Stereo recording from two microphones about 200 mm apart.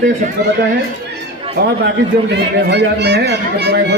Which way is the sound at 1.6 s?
55° right (ahead or behind).